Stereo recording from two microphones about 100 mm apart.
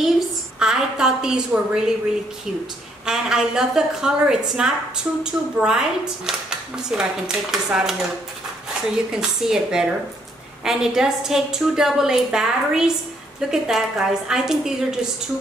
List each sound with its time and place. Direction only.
0.6 s a woman's voice: 5° right (ahead or behind)
3.1 s a woman's voice: 5° right (ahead or behind)
9.1 s a woman's voice: 5° right (ahead or behind)